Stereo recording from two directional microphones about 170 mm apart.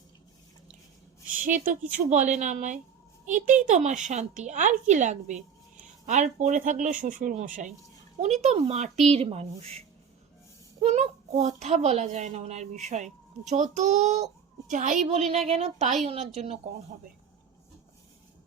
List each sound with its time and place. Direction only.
1.4 s a child's voice: 50° right (ahead or behind)
10.8 s a child's voice: 40° right (ahead or behind)